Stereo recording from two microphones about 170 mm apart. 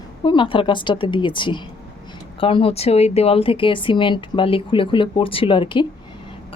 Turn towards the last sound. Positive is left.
turn(degrees=30)  # may be behind; listen again after turning